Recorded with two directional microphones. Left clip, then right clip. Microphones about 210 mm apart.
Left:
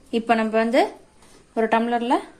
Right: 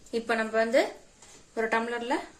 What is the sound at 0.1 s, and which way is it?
Speech, 40° left (ahead or behind).